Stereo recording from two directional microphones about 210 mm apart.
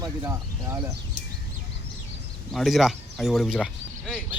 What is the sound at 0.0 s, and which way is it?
Speech, 15° right (ahead or behind).